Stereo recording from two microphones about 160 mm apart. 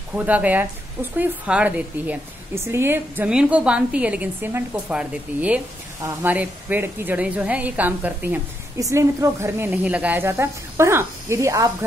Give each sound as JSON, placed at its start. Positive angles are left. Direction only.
{"t": 0.1, "sound": "a woman's voice", "side_deg": -10}